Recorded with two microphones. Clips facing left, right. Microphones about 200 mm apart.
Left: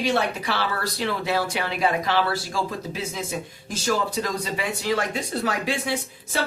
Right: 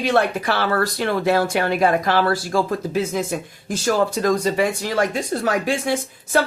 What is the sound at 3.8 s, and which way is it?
Speech, 50° right (ahead or behind).